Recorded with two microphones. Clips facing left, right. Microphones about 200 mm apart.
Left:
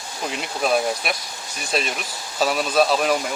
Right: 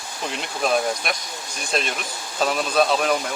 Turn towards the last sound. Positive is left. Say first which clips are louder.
# left 1 dB
turn(degrees=0)  # may be behind; listen again after turning